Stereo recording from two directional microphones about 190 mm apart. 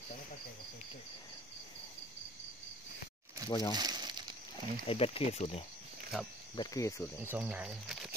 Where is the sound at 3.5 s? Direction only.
20° left (ahead or behind).